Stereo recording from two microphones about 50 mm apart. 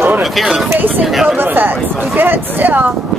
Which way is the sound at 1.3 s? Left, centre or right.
Right.